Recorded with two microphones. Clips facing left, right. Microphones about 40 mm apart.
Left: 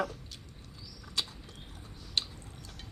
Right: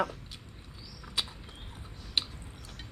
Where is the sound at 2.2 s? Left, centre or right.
Centre.